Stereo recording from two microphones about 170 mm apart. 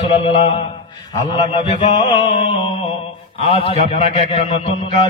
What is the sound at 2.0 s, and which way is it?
A man's voice, 30° left (ahead or behind).